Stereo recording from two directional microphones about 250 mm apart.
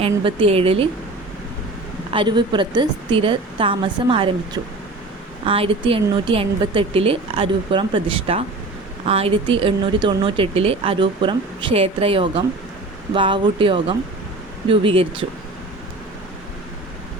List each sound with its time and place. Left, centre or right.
0.0 s speech: right
2.0 s speech: centre